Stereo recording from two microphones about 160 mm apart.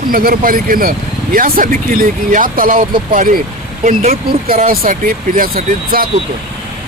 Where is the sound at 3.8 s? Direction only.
45° right (ahead or behind).